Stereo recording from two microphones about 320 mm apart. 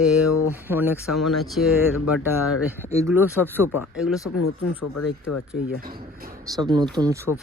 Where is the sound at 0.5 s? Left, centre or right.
Centre.